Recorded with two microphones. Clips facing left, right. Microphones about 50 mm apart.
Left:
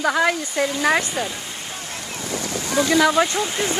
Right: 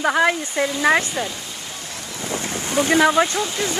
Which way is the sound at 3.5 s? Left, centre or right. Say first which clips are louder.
Left 1 dB; left.